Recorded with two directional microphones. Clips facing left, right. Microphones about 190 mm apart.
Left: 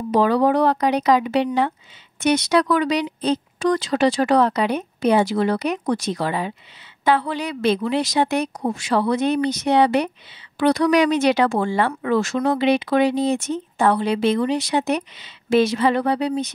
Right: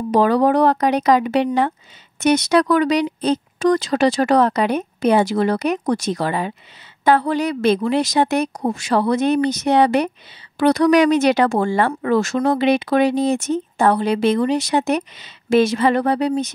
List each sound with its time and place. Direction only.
0.1 s speech: 45° right (ahead or behind)